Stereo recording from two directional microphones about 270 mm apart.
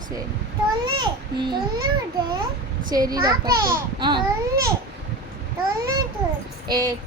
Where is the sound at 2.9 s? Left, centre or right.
Centre.